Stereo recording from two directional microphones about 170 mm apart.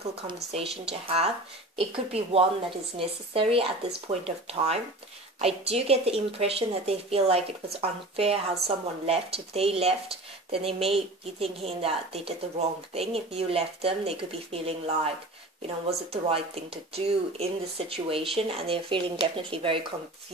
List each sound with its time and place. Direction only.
0.3 s a woman's voice: 35° right (ahead or behind)